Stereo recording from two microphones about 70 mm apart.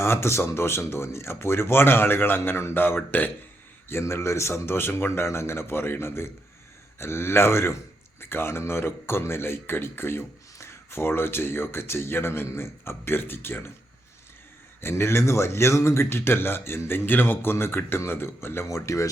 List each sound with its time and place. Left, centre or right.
0.0 s speech: left
14.8 s speech: left